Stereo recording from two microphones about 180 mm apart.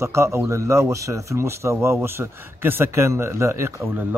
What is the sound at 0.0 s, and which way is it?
Speech, 15° right (ahead or behind).